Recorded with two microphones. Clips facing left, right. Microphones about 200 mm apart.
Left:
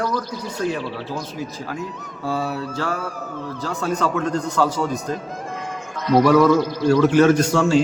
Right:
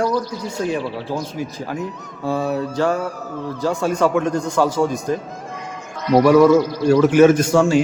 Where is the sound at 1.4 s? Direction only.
15° right (ahead or behind).